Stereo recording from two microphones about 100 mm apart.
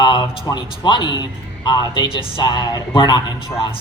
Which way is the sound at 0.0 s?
45° left (ahead or behind).